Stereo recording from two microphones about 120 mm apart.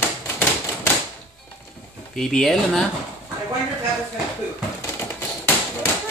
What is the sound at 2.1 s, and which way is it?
Speech, 5° left (ahead or behind).